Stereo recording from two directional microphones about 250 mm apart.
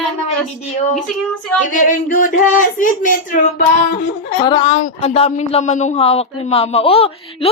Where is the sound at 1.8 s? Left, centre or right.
Left.